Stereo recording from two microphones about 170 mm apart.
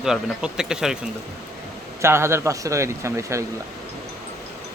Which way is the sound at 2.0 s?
15° right (ahead or behind).